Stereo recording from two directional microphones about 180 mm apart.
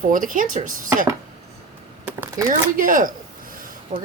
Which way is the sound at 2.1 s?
10° right (ahead or behind).